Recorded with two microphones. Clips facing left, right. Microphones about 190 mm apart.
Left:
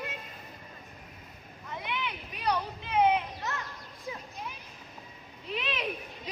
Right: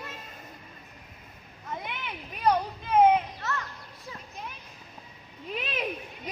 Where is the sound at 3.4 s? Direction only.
15° left (ahead or behind).